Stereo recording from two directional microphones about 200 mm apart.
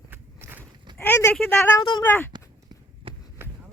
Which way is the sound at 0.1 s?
10° right (ahead or behind).